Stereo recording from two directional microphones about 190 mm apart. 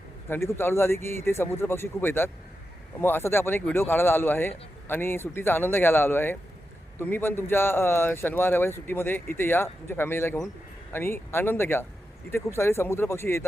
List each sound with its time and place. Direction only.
0.3 s speech: 15° left (ahead or behind)